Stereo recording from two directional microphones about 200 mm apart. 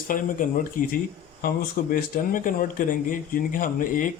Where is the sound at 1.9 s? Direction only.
45° left (ahead or behind).